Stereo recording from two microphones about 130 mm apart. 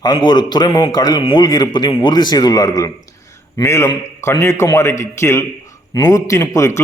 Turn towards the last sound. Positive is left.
turn(degrees=25)  # may be behind; listen again after turning